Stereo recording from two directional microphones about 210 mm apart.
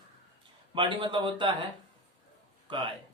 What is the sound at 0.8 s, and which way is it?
Speech, 20° right (ahead or behind).